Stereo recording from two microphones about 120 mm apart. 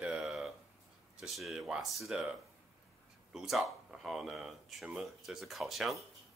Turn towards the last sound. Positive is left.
turn(degrees=0)  # may be behind; listen again after turning